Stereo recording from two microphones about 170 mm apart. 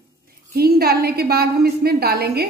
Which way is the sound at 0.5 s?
65° right (ahead or behind).